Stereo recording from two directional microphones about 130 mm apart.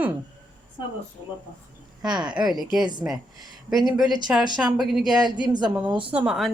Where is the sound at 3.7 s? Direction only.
Centre (ahead or behind).